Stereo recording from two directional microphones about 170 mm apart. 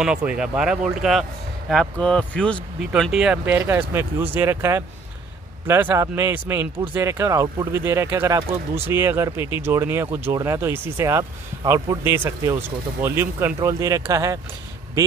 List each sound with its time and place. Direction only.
0.0 s speech: 5° right (ahead or behind)